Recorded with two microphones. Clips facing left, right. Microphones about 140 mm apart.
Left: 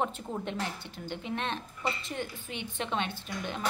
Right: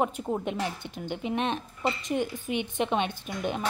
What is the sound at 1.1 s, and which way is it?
A woman's voice, 15° right (ahead or behind).